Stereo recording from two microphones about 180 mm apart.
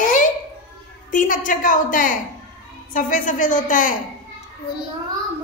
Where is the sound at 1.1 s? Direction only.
45° left (ahead or behind).